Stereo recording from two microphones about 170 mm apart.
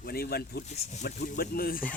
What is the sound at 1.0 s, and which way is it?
Speech, 65° left (ahead or behind).